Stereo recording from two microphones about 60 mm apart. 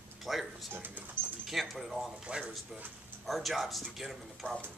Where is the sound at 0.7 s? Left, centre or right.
Right.